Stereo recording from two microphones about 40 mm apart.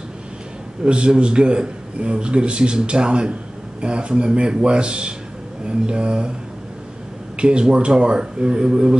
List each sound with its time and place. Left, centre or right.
0.8 s a man's voice: right
7.3 s a man's voice: right